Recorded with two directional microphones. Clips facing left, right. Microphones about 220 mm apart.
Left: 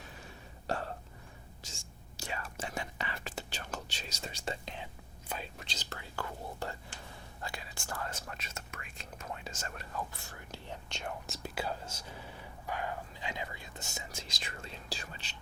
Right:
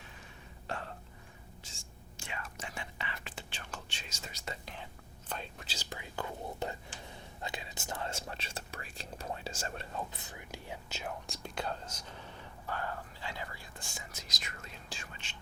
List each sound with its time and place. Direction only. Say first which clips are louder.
0.7 s whispering: left 5 dB; 40° left (ahead or behind); by 4.9 s 20° left (ahead or behind)
5.3 s speech: left 1 dB; centre (ahead or behind); by 15.4 s 35° left (ahead or behind)